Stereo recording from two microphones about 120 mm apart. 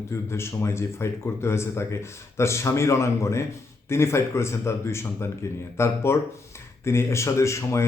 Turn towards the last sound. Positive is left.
turn(degrees=25)  # may be behind; listen again after turning